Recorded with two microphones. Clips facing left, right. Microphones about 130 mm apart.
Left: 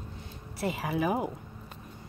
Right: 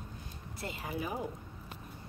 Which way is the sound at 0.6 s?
90° left.